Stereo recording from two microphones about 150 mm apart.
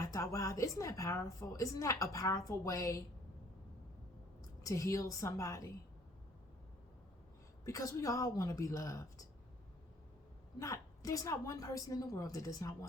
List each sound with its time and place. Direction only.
0.0 s a woman's voice: 20° left (ahead or behind)
4.6 s a woman's voice: 20° left (ahead or behind)
7.6 s a woman's voice: 20° left (ahead or behind)
10.6 s a woman's voice: 20° left (ahead or behind)